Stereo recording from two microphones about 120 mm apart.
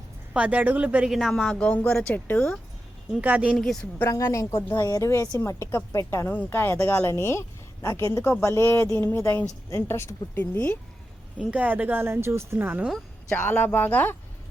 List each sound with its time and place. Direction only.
0.3 s speech: 15° right (ahead or behind); by 2.6 s 10° left (ahead or behind)
3.1 s speech: 10° right (ahead or behind)
3.6 s speech: 5° left (ahead or behind)
4.1 s speech: 25° left (ahead or behind)
11.3 s speech: 15° right (ahead or behind)
13.3 s speech: 15° left (ahead or behind)